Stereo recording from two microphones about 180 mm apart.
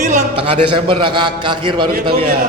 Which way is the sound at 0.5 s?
30° right (ahead or behind).